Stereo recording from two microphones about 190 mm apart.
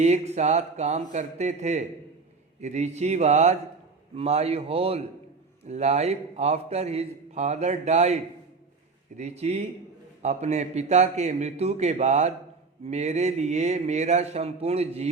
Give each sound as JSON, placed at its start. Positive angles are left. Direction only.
{"t": 0.0, "sound": "a man's voice", "side_deg": -35}